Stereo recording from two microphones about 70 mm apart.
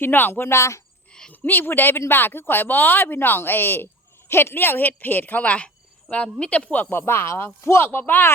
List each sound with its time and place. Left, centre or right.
0.0 s speech: left
1.3 s speech: left
6.9 s speech: left